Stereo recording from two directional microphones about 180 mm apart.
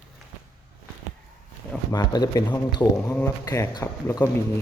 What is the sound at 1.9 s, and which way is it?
Speech, 20° left (ahead or behind).